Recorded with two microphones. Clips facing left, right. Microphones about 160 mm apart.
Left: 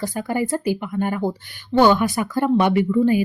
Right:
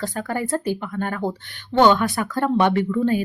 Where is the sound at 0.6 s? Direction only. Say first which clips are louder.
Left 3 dB; 10° left (ahead or behind).